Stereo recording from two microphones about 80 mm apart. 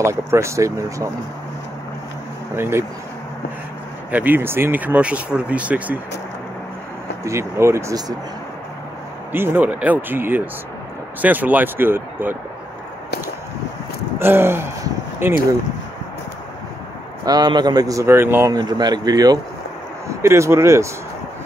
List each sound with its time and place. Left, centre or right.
0.0 s speech: right
2.5 s speech: right
4.1 s speech: right
7.2 s speech: right
9.3 s speech: right
14.2 s speech: right
17.2 s speech: right
18.0 s speech: right
18.5 s speech: right
20.1 s speech: right